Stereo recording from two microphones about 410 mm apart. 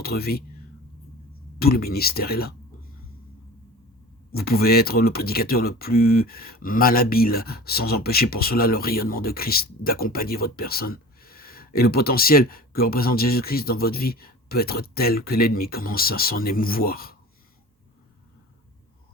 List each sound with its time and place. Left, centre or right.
0.0 s speech: left
1.5 s speech: left
4.3 s speech: left